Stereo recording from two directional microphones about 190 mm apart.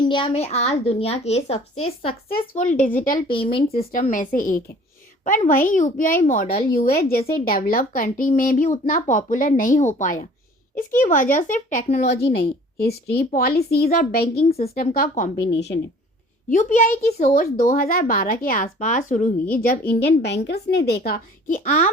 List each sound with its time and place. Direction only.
0.0 s a woman's voice: 25° left (ahead or behind)
2.6 s a woman's voice: 45° left (ahead or behind)
3.2 s speech: 30° left (ahead or behind)
3.9 s a woman's voice: 45° left (ahead or behind)
12.8 s a woman's voice: 55° left (ahead or behind)
14.3 s a woman's voice: 30° left (ahead or behind)
15.5 s a woman's voice: 65° left (ahead or behind)
16.5 s a woman's voice: 40° left (ahead or behind)